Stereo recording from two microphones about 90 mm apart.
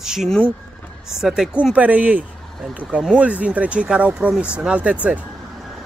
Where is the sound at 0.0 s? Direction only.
5° right (ahead or behind).